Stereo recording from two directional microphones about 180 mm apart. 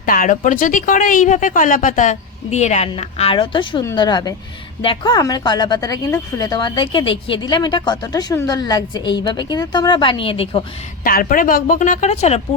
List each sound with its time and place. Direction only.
0.0 s a woman's voice: 50° left (ahead or behind); by 10.6 s 30° left (ahead or behind)
11.0 s a woman's voice: 50° left (ahead or behind)